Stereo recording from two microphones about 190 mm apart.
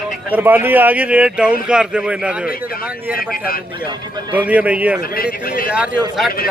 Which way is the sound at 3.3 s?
50° left (ahead or behind).